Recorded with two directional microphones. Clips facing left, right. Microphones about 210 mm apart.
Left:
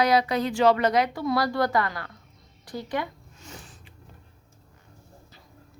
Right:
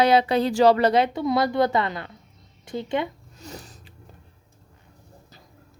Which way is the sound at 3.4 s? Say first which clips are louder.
Right 6 dB; 40° right (ahead or behind).